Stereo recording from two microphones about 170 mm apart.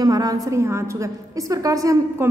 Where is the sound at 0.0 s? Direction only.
20° right (ahead or behind).